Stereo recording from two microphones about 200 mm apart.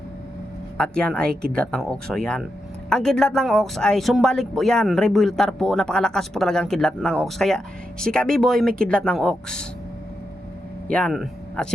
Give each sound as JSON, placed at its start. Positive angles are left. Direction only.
{"t": 0.8, "sound": "speech", "side_deg": 5}
{"t": 10.9, "sound": "speech", "side_deg": 0}